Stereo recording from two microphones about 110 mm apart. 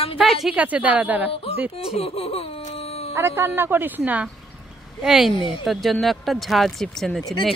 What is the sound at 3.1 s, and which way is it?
Speech, 25° right (ahead or behind).